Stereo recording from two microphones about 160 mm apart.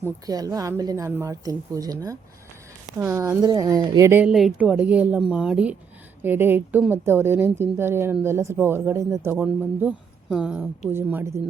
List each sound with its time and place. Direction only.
0.0 s speech: 25° right (ahead or behind)